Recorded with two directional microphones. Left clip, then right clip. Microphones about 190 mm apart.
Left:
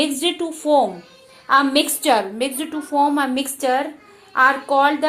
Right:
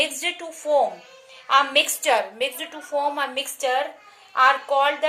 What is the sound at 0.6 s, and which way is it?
Speech, 25° left (ahead or behind).